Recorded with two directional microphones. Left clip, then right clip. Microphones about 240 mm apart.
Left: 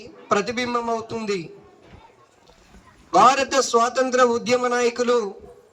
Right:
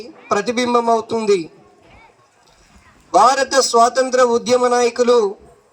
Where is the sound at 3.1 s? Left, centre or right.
Right.